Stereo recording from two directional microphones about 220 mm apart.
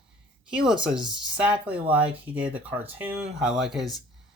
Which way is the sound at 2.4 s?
25° right (ahead or behind).